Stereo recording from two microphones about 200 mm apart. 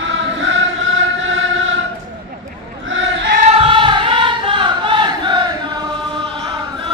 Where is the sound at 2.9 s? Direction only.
65° right (ahead or behind).